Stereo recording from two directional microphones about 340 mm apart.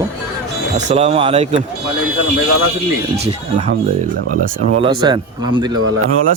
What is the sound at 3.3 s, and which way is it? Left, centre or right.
Speech, right.